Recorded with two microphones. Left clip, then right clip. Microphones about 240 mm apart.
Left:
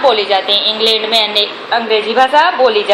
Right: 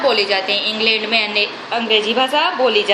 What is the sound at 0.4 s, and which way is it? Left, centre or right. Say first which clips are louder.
Speech: left 5 dB; right.